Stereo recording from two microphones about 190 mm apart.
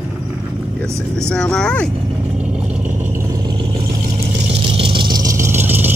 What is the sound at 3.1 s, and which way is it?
Vehicle, 20° right (ahead or behind).